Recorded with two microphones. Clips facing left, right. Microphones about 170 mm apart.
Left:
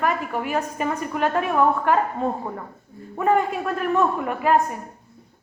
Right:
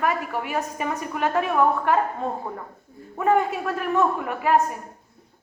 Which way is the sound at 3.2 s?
5° right (ahead or behind).